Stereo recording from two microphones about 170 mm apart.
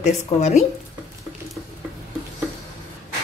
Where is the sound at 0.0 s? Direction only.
40° left (ahead or behind).